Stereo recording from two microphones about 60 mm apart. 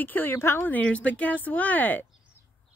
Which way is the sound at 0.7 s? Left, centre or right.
Left.